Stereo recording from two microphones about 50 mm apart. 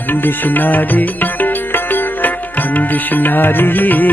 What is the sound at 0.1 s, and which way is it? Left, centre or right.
Music, left.